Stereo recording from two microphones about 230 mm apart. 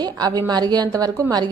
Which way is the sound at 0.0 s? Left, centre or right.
Centre.